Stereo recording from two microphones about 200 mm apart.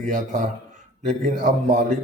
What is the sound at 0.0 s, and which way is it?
A man's voice, 40° right (ahead or behind).